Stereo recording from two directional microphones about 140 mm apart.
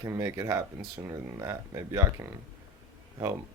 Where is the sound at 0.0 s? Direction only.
20° right (ahead or behind).